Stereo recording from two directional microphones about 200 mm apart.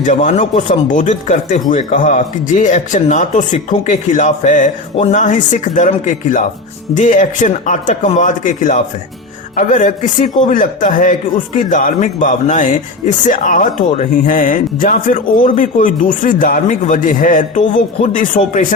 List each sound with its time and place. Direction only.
0.0 s speech: 40° left (ahead or behind)